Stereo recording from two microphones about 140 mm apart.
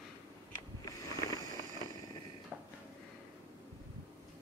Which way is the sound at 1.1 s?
25° left (ahead or behind).